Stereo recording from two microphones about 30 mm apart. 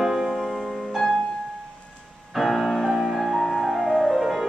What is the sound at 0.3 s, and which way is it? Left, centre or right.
Music, centre.